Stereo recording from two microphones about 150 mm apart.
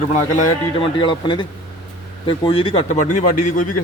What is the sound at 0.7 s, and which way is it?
Speech, 30° left (ahead or behind).